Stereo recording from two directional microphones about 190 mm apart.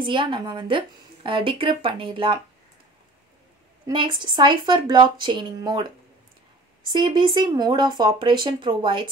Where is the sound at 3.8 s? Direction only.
25° right (ahead or behind).